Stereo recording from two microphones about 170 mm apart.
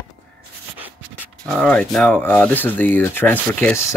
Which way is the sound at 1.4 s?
5° left (ahead or behind).